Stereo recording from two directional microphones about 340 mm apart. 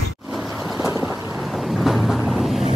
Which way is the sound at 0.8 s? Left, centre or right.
Centre.